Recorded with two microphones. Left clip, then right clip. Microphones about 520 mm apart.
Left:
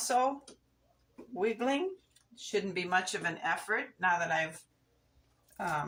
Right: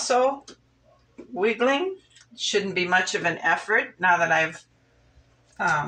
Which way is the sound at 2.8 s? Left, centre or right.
Left.